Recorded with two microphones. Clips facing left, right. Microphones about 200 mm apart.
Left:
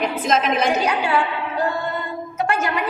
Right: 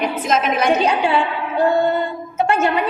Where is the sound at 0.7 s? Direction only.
25° right (ahead or behind).